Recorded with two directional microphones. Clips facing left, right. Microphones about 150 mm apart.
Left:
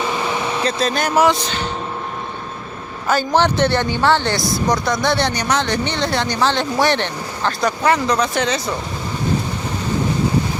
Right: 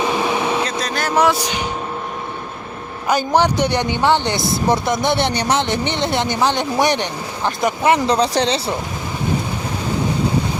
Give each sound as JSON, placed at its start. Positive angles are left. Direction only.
{"t": 0.0, "sound": "a sound", "side_deg": -15}
{"t": 0.8, "sound": "speech", "side_deg": 20}
{"t": 1.1, "sound": "speech", "side_deg": 0}
{"t": 1.4, "sound": "speech", "side_deg": -15}
{"t": 3.1, "sound": "speech", "side_deg": -15}